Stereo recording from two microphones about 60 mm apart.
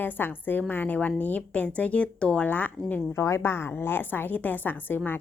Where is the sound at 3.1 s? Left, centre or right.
Left.